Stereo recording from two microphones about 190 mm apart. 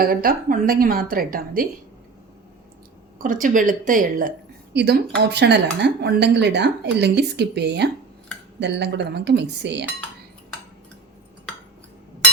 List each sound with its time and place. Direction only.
0.0 s a woman's voice: 50° right (ahead or behind)
3.2 s a woman's voice: 45° right (ahead or behind)
4.7 s speech: 60° right (ahead or behind)